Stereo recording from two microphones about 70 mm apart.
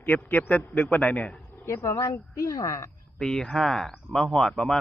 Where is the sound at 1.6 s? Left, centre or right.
Left.